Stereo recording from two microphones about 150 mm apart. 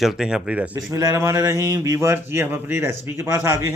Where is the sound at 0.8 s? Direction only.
25° right (ahead or behind).